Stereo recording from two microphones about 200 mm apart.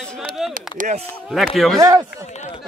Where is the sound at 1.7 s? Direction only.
15° right (ahead or behind).